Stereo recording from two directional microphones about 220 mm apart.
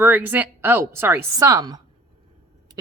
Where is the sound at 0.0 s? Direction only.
10° right (ahead or behind).